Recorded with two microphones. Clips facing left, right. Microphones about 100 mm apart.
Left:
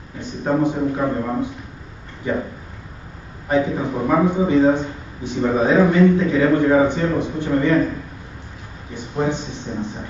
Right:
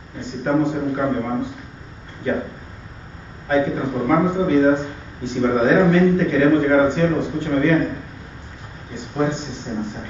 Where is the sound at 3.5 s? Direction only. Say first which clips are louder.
Even; 15° left (ahead or behind).